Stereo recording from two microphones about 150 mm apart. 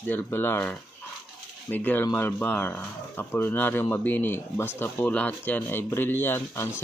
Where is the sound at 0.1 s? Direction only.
15° left (ahead or behind).